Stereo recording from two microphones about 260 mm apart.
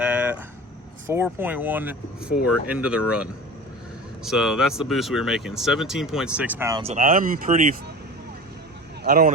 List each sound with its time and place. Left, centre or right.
0.0 s vehicle: centre
1.0 s speech: centre
4.2 s speech: centre
6.8 s speech: right
9.0 s speech: right